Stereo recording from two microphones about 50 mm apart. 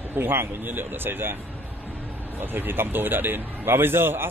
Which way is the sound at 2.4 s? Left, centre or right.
Right.